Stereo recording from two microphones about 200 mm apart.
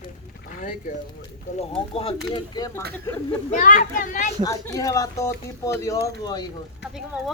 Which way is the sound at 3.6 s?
40° left (ahead or behind).